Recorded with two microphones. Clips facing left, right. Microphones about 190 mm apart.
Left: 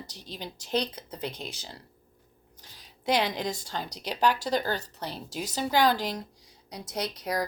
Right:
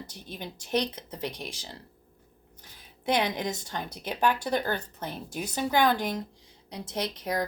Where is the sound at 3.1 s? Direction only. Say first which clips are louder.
Even; 20° right (ahead or behind).